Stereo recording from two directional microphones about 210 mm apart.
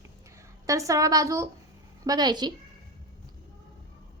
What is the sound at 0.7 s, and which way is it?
A woman's voice, 15° right (ahead or behind).